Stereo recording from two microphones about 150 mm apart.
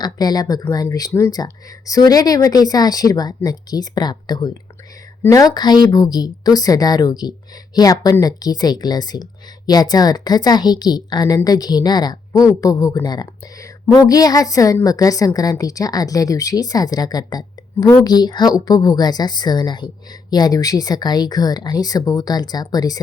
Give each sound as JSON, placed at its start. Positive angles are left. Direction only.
{"t": 0.0, "sound": "a woman's voice", "side_deg": 25}